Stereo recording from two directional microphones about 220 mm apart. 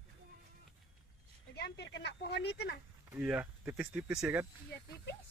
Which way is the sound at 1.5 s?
50° left (ahead or behind).